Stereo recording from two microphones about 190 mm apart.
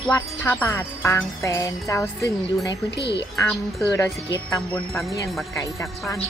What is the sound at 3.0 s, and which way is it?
Speech, 60° left (ahead or behind).